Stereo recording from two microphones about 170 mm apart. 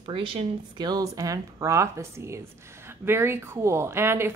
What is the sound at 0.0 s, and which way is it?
Speech, 30° right (ahead or behind).